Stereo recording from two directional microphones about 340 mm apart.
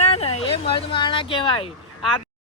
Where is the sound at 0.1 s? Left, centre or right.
Centre.